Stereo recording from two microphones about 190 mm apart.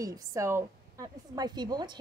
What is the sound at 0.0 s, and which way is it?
A woman's voice, 15° right (ahead or behind).